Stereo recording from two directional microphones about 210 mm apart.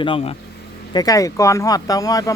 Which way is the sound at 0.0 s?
25° left (ahead or behind).